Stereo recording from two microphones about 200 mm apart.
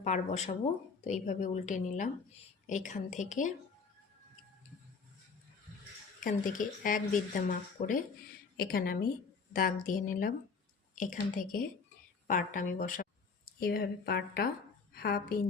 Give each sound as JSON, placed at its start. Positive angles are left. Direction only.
{"t": 0.0, "sound": "a woman's voice", "side_deg": 35}
{"t": 6.2, "sound": "a woman's voice", "side_deg": 40}